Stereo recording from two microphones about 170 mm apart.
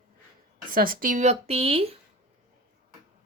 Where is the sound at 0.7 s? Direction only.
55° right (ahead or behind); by 2.0 s 35° right (ahead or behind).